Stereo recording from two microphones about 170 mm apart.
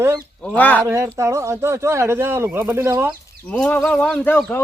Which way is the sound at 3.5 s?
10° left (ahead or behind).